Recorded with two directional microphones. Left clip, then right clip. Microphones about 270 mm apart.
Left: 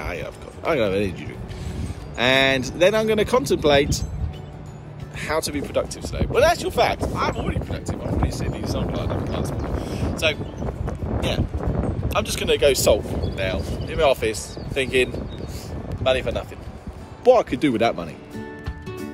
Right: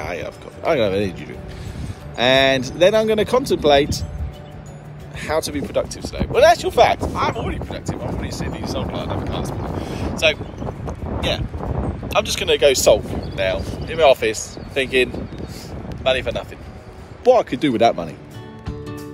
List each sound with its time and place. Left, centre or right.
0.0 s speech: centre
5.2 s speech: centre